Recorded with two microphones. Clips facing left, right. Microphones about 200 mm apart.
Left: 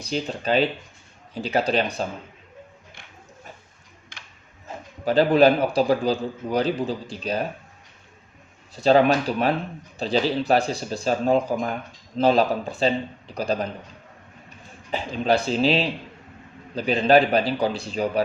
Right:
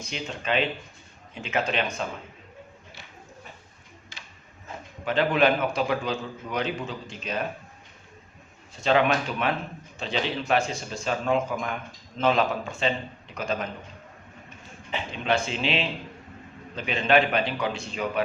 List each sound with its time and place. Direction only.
0.0 s speech: 35° left (ahead or behind)
5.0 s speech: 35° left (ahead or behind)
8.7 s speech: 35° left (ahead or behind)
14.8 s speech: 40° left (ahead or behind)